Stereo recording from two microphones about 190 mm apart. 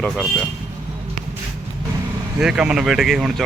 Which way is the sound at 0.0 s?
5° left (ahead or behind).